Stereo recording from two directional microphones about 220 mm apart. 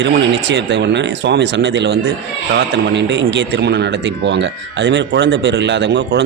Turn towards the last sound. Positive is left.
turn(degrees=-55)  # may be behind; listen again after turning